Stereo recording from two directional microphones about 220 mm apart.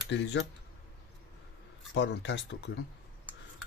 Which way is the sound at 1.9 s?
55° left (ahead or behind).